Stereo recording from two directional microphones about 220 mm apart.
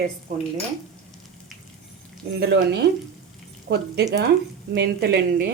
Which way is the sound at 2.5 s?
50° right (ahead or behind).